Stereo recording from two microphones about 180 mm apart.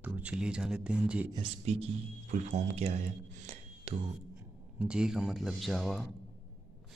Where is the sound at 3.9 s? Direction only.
35° right (ahead or behind).